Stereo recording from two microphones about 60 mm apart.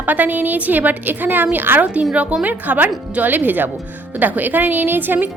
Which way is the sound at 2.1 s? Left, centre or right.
Right.